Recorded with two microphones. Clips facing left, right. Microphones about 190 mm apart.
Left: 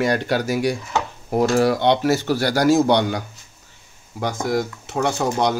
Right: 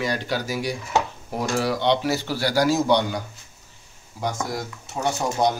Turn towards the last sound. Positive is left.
turn(degrees=75)  # may be behind; listen again after turning